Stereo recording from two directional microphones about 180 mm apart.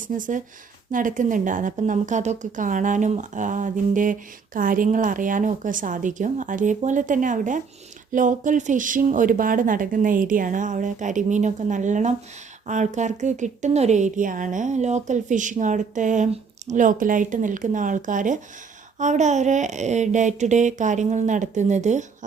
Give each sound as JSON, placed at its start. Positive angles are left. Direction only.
{"t": 0.0, "sound": "a woman's voice", "side_deg": -45}